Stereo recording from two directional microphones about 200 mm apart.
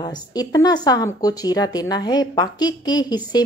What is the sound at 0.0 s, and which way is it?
A woman's voice, 20° left (ahead or behind).